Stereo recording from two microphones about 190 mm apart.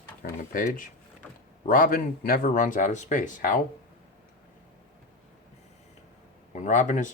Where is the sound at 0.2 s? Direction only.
45° left (ahead or behind).